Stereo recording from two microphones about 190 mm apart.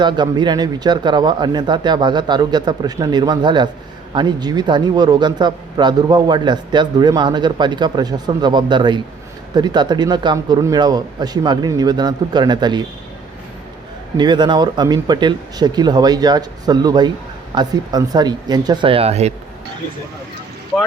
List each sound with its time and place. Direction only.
0.0 s a man's voice: 25° right (ahead or behind)
14.2 s a man's voice: 25° right (ahead or behind)